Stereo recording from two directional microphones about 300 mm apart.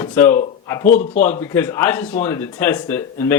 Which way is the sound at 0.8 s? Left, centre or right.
Left.